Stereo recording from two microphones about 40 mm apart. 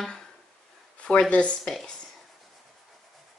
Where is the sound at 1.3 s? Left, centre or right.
Left.